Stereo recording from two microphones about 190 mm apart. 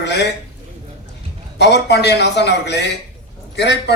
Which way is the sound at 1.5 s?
65° left (ahead or behind).